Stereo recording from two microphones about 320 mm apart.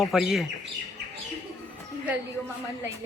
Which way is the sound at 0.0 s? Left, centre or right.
Centre.